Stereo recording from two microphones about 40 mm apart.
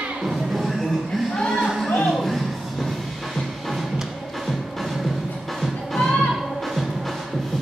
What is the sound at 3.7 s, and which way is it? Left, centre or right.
Music, centre.